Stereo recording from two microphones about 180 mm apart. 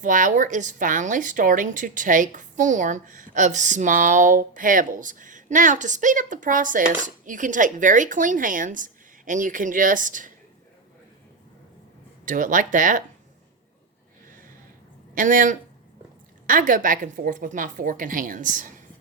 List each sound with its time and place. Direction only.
0.0 s a woman's voice: 45° right (ahead or behind)
12.2 s a woman's voice: 45° right (ahead or behind)
15.1 s a woman's voice: 50° right (ahead or behind)